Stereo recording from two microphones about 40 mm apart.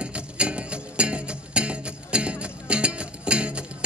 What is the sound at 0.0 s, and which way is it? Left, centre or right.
Music, right.